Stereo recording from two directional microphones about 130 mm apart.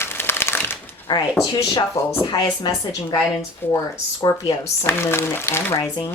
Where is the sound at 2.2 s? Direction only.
35° left (ahead or behind).